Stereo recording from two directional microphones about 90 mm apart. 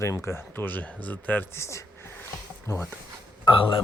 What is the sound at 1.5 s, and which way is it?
Speech, 30° left (ahead or behind).